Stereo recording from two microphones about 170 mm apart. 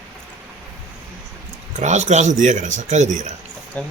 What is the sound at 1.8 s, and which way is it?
Speech, 40° right (ahead or behind).